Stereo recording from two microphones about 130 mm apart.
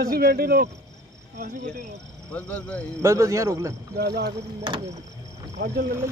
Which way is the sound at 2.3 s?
10° left (ahead or behind).